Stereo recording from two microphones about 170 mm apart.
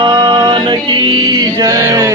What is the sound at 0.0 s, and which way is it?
Mantra, 25° right (ahead or behind).